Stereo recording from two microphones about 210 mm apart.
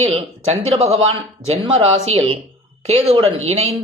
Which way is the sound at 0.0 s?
25° right (ahead or behind).